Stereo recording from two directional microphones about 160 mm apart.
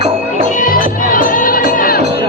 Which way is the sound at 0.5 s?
55° left (ahead or behind).